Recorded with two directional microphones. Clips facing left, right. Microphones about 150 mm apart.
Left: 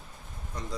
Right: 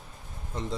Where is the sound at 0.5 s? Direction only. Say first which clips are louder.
Right 5 dB; 25° right (ahead or behind).